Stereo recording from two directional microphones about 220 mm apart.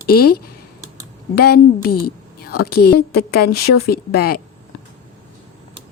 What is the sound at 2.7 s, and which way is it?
Speech, 90° left.